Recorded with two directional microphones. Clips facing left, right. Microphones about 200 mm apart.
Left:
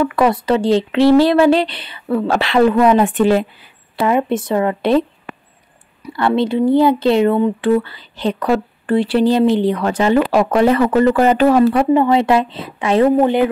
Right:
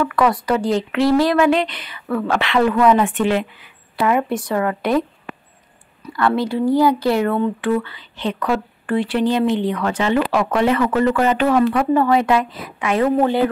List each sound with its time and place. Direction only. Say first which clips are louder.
0.0 s speech: left 3 dB; 25° left (ahead or behind)
2.7 s speech: left 2 dB; 20° left (ahead or behind)
3.0 s speech: left 4 dB; 35° left (ahead or behind)
6.1 s speech: left 3 dB; 25° left (ahead or behind)
7.6 s speech: left 4 dB; 35° left (ahead or behind)
11.9 s speech: left 3 dB; 20° left (ahead or behind)
13.2 s speech: left 3 dB; 15° left (ahead or behind)